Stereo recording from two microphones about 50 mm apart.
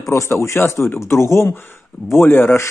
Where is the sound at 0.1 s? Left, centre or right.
Left.